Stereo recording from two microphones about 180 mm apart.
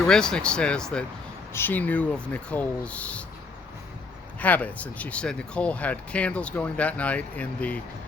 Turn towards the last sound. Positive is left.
turn(degrees=5)  # may be behind; listen again after turning